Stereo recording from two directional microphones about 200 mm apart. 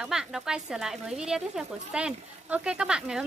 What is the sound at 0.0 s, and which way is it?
Speech, 5° right (ahead or behind).